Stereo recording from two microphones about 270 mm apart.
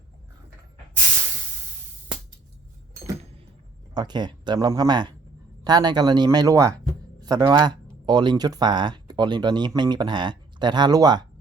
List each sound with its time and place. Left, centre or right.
3.9 s speech: centre